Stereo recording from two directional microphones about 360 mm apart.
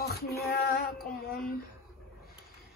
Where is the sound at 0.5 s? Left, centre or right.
Left.